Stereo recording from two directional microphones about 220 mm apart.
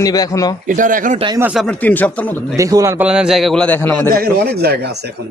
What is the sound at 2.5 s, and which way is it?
A man's voice, 15° right (ahead or behind).